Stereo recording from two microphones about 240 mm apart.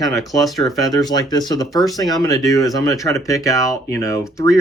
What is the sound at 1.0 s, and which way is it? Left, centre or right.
Speech, centre.